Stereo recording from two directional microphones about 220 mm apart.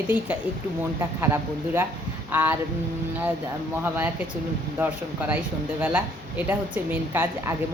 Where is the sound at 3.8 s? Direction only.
10° right (ahead or behind).